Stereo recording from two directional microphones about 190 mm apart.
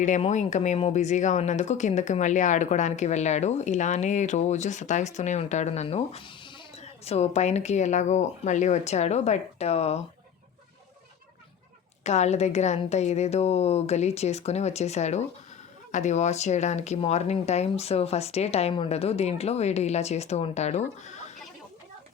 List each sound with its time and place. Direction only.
0.0 s speech: 40° left (ahead or behind)
12.0 s speech: 35° left (ahead or behind)